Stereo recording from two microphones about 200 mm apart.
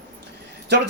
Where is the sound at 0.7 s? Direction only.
60° right (ahead or behind).